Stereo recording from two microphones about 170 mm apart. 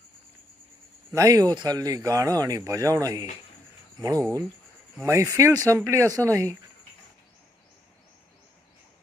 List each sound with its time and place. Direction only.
1.1 s speech: 20° right (ahead or behind)